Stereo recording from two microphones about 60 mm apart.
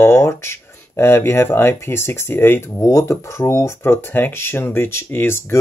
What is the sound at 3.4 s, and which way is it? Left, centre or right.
Speech, left.